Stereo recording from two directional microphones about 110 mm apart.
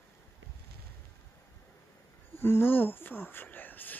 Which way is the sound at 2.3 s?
20° left (ahead or behind).